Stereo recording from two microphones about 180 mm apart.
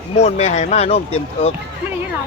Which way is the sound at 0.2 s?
40° left (ahead or behind).